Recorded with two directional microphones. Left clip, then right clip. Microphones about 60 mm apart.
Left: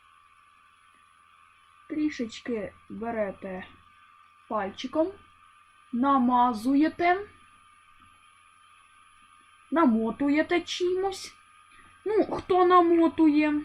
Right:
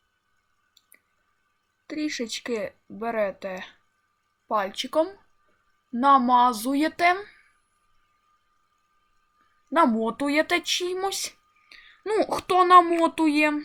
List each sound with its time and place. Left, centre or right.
1.9 s speech: right
10.0 s speech: right